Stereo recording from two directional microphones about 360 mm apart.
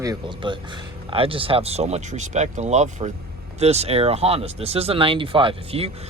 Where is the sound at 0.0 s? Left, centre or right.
Centre.